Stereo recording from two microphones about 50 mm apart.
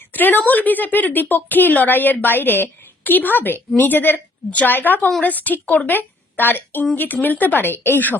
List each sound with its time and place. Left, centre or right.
0.1 s a woman's voice: left